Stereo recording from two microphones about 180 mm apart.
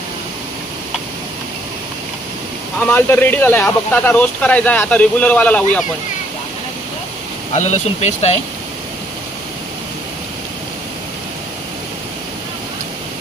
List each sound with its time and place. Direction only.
2.8 s speech: 10° left (ahead or behind)
7.5 s speech: 40° left (ahead or behind)